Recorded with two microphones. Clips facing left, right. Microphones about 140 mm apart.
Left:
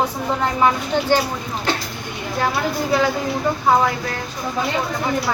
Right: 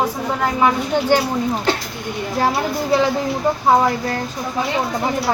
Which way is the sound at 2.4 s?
35° right (ahead or behind).